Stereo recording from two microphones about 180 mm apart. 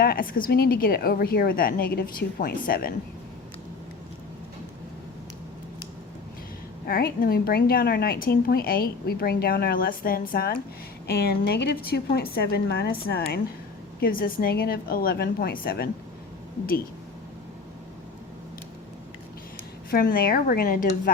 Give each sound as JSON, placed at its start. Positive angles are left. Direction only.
{"t": 0.0, "sound": "speech", "side_deg": 55}
{"t": 6.8, "sound": "speech", "side_deg": 55}
{"t": 19.9, "sound": "a woman's voice", "side_deg": 55}